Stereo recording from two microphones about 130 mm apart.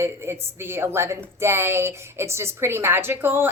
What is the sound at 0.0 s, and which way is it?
A woman's voice, 20° right (ahead or behind).